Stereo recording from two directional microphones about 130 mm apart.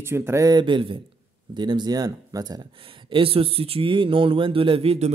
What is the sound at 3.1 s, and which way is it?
Speech, 45° right (ahead or behind).